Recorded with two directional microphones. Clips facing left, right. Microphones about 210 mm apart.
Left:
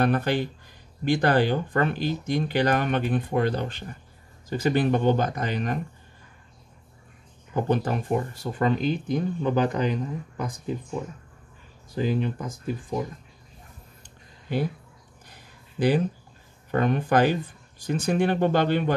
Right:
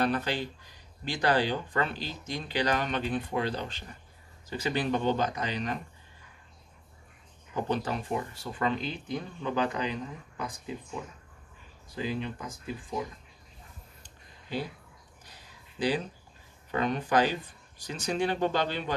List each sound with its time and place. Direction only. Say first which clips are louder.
0.0 s speech: left 6 dB; 55° left (ahead or behind)
7.5 s speech: left 6 dB; 50° left (ahead or behind)
11.9 s speech: left 7 dB; 45° left (ahead or behind)
14.5 s speech: left 7 dB; 55° left (ahead or behind)
15.2 s a sound: left 3 dB; 55° left (ahead or behind)
16.7 s speech: left 5 dB; 55° left (ahead or behind)